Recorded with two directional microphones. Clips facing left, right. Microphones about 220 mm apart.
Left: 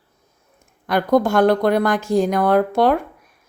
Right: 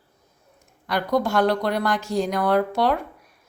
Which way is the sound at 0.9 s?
50° left (ahead or behind).